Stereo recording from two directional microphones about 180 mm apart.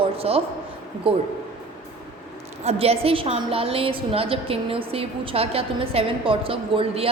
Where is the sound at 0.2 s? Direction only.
35° right (ahead or behind).